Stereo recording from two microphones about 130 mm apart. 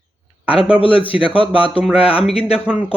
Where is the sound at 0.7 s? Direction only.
45° left (ahead or behind).